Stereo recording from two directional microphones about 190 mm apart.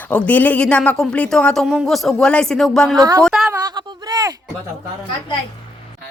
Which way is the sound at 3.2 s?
5° right (ahead or behind).